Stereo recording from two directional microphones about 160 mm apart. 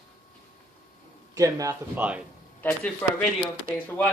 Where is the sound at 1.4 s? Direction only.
20° right (ahead or behind).